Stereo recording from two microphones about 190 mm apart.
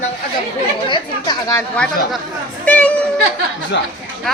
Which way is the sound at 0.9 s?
20° left (ahead or behind).